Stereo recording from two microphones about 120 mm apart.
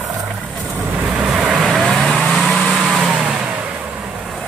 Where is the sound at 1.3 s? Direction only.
5° right (ahead or behind).